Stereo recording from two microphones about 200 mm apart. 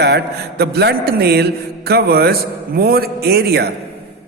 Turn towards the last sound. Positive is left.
turn(degrees=-55)  # may be behind; listen again after turning